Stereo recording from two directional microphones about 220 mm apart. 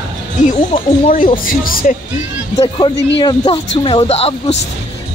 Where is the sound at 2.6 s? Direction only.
20° left (ahead or behind).